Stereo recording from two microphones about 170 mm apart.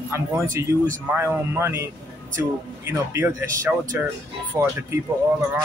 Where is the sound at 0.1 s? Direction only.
15° right (ahead or behind).